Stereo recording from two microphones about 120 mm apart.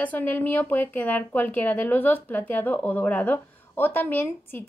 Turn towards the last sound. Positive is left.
turn(degrees=15)  # may be behind; listen again after turning